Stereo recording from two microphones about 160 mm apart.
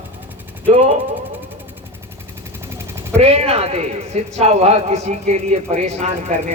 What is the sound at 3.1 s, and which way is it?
A man's voice, 40° right (ahead or behind).